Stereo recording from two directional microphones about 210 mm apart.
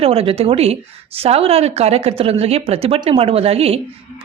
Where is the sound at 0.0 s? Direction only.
25° right (ahead or behind).